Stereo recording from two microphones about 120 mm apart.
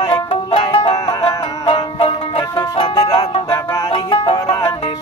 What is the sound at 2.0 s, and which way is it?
Music, 50° left (ahead or behind).